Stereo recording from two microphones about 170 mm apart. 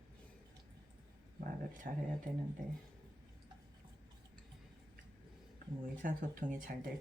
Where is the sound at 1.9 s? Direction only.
55° right (ahead or behind).